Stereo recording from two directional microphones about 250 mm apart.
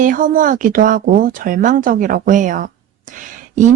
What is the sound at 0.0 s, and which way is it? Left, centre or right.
Speech, right.